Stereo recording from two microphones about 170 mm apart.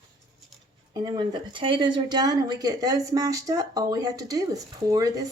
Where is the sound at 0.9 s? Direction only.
25° right (ahead or behind).